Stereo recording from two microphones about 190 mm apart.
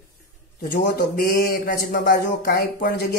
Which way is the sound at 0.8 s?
45° left (ahead or behind).